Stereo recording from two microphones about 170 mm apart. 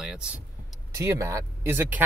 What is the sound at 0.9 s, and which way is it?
Speech, 20° right (ahead or behind).